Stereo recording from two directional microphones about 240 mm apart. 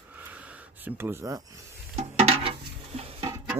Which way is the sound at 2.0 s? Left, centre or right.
Right.